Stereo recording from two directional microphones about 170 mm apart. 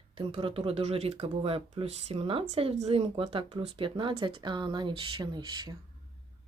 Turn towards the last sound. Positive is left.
turn(degrees=-25)  # may be behind; listen again after turning